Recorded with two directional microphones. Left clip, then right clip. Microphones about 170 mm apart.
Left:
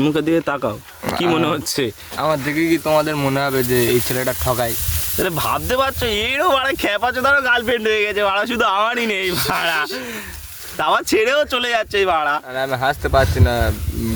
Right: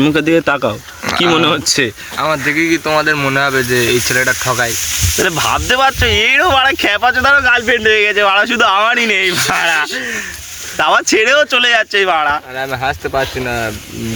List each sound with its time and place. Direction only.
0.0 s speech: 25° right (ahead or behind)
1.0 s speech: 20° left (ahead or behind)
1.3 s speech: 15° right (ahead or behind)
2.1 s speech: 20° left (ahead or behind)
5.1 s speech: 5° right (ahead or behind)
12.5 s speech: 25° left (ahead or behind)